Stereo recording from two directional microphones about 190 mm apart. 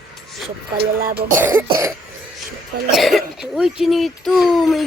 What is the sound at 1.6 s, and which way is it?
Speech, 25° right (ahead or behind).